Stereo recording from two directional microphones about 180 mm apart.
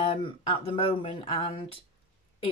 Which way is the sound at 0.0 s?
30° left (ahead or behind).